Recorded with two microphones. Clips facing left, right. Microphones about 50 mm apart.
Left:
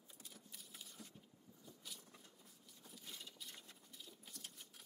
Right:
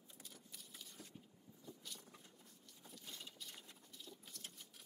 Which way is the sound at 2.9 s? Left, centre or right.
Centre.